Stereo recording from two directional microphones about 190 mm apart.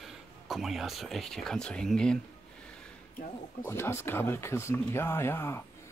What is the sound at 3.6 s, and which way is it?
Speech, 10° left (ahead or behind).